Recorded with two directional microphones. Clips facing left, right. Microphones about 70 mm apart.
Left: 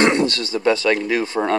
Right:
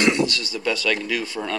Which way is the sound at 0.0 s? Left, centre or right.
Left.